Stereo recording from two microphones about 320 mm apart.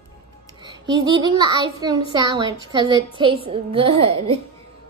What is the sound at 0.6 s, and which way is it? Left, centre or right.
A child's voice, centre.